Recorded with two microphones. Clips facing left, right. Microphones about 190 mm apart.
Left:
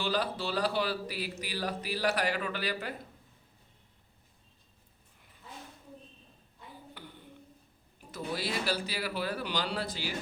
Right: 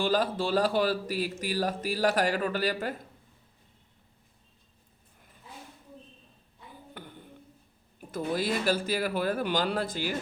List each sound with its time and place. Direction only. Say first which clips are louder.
0.0 s speech: right 5 dB; 50° right (ahead or behind)
7.0 s a sound: right 6 dB; 50° right (ahead or behind)
8.1 s speech: right 6 dB; 50° right (ahead or behind)